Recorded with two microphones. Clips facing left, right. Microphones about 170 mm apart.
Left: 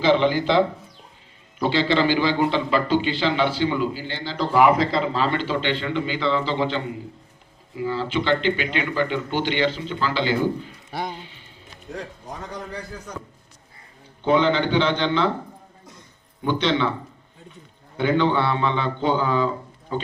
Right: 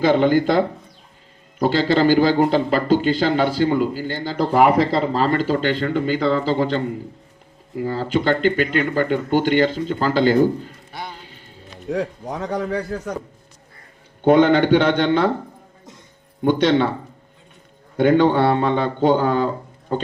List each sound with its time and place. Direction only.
0.0 s a man's voice: 50° right (ahead or behind)
11.2 s music: 45° right (ahead or behind)
11.9 s a man's voice: 75° right (ahead or behind)
14.3 s a man's voice: 55° right (ahead or behind)
16.4 s a man's voice: 50° right (ahead or behind)
17.9 s a man's voice: 50° right (ahead or behind)